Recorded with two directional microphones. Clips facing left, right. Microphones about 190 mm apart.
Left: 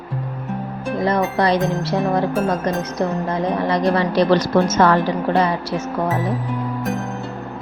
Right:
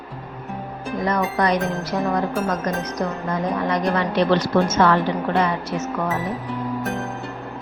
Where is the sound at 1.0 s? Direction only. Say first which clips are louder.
Left 3 dB; 30° left (ahead or behind).